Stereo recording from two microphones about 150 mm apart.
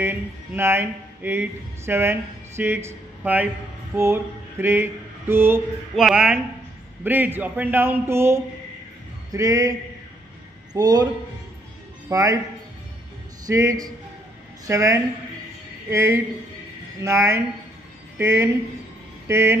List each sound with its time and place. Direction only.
0.0 s speech: 15° right (ahead or behind)
3.9 s a sound: 15° right (ahead or behind)
5.9 s a woman's voice: centre (ahead or behind); by 11.1 s 25° right (ahead or behind)
12.1 s speech: 20° right (ahead or behind)
13.5 s a woman's voice: 20° right (ahead or behind)